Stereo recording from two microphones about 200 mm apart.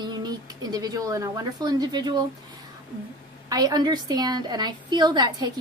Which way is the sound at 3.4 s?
20° right (ahead or behind).